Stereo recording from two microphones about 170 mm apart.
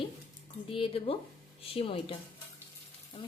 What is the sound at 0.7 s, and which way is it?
Speech, 30° left (ahead or behind).